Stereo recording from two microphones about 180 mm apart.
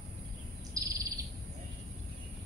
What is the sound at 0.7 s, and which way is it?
Bird vocalization, 20° right (ahead or behind).